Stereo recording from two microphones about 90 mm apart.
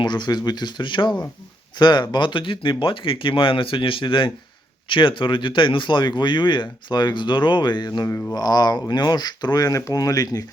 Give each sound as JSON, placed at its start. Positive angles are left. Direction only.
{"t": 0.0, "sound": "speech", "side_deg": 55}